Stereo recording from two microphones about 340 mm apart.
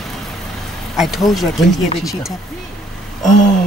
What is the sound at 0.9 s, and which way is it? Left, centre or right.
Speech, centre.